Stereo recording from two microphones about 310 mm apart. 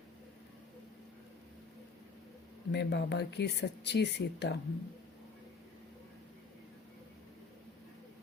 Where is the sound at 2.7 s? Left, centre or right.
Left.